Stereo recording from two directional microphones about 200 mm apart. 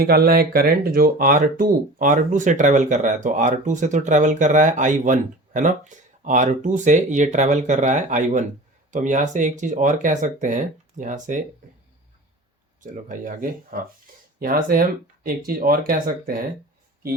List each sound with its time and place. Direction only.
0.0 s speech: 50° right (ahead or behind)
12.8 s speech: 40° right (ahead or behind)